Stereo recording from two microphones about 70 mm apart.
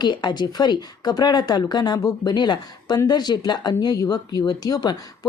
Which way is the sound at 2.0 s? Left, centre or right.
Left.